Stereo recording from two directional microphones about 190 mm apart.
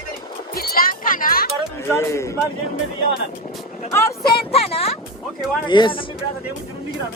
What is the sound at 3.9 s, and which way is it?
Speech, 15° left (ahead or behind).